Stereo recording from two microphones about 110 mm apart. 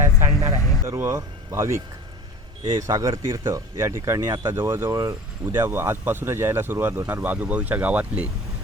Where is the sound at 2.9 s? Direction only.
25° right (ahead or behind).